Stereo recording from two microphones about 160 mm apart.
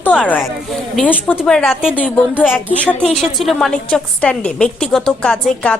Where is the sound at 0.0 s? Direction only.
10° left (ahead or behind).